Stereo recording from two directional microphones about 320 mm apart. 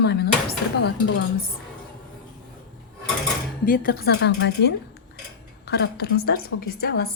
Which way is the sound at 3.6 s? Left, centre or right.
Left.